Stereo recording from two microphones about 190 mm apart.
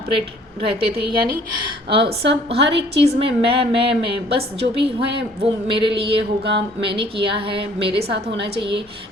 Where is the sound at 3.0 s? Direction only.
30° right (ahead or behind).